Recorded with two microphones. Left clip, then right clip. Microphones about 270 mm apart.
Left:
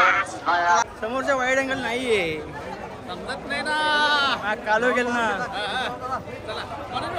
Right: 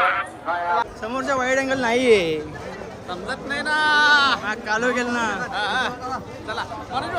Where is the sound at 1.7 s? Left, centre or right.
Right.